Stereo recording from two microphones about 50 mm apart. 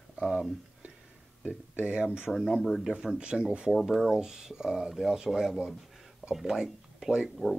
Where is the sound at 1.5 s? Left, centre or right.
Right.